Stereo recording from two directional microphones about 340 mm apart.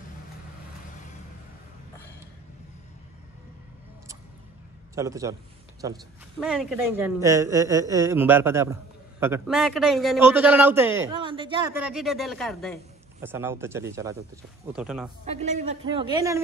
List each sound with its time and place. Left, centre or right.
4.9 s a woman's voice: centre
15.2 s a woman's voice: centre